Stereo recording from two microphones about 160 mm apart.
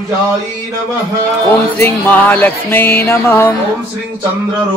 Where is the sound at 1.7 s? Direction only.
10° left (ahead or behind).